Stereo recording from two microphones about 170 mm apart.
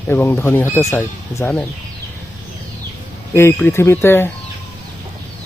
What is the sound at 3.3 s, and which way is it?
Speech, 15° left (ahead or behind).